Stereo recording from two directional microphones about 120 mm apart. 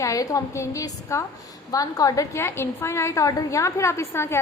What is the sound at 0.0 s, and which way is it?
A woman's voice, 30° left (ahead or behind).